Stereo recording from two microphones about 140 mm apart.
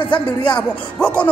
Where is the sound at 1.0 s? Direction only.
5° left (ahead or behind).